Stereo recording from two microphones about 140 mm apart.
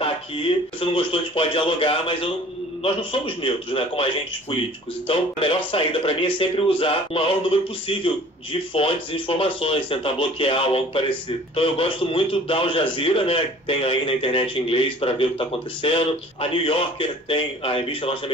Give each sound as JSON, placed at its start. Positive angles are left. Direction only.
{"t": 0.7, "sound": "speech", "side_deg": 40}
{"t": 8.7, "sound": "speech", "side_deg": 40}